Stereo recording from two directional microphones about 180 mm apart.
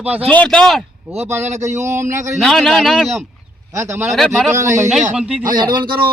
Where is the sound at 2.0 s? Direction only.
45° right (ahead or behind).